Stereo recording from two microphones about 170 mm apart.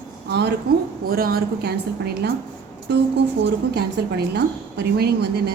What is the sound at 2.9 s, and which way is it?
A woman's voice, 80° right.